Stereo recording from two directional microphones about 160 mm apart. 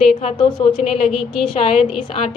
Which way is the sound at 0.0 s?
40° left (ahead or behind).